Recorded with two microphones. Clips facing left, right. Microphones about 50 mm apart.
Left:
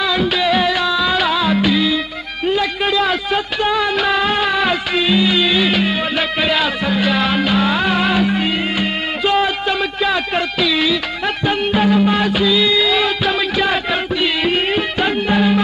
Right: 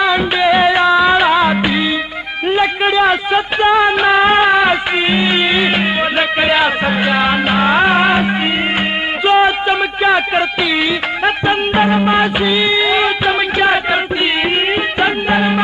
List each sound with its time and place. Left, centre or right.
0.0 s music: right
2.4 s a man's voice: right
14.4 s music: right